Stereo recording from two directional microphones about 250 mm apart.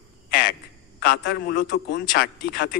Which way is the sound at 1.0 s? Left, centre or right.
Left.